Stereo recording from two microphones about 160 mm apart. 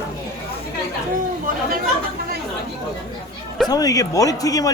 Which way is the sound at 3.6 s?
25° left (ahead or behind).